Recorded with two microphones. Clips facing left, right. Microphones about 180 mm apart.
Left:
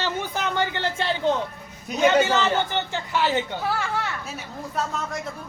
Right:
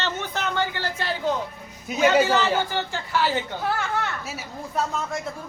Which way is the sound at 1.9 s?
5° right (ahead or behind).